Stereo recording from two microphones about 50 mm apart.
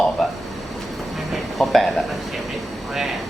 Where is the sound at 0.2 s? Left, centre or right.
Centre.